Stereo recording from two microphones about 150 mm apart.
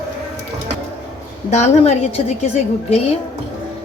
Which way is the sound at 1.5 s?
50° left (ahead or behind).